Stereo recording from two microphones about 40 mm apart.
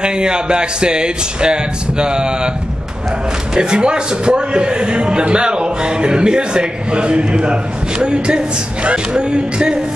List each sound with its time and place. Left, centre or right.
0.0 s a man's voice: right
3.5 s a man's voice: right